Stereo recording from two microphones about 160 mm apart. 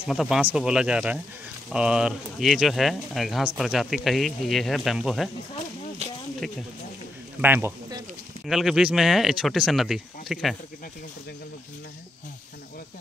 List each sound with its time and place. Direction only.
0.0 s speech: centre (ahead or behind)
6.0 s a sound: 40° right (ahead or behind)
7.4 s a man's voice: 15° right (ahead or behind)
8.5 s speech: centre (ahead or behind)